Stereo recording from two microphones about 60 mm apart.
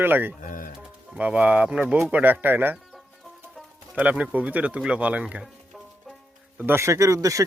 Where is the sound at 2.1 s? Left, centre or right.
Right.